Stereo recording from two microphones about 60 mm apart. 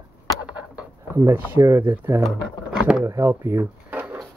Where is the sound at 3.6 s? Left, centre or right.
Right.